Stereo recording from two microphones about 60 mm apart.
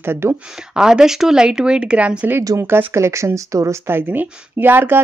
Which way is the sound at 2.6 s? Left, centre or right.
Right.